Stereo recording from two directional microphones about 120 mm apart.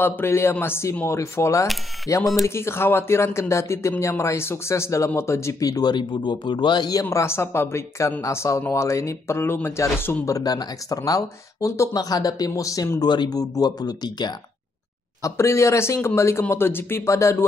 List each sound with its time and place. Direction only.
0.0 s speech: 20° left (ahead or behind)
13.0 s speech: 35° left (ahead or behind)
15.2 s speech: 25° left (ahead or behind)